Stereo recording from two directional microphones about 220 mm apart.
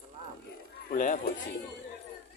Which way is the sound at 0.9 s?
35° left (ahead or behind).